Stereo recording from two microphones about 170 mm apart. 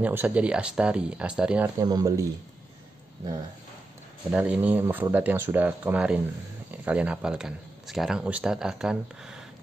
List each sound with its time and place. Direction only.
0.0 s speech: 10° right (ahead or behind)
1.8 s speech: 20° right (ahead or behind)
4.3 s speech: 5° right (ahead or behind)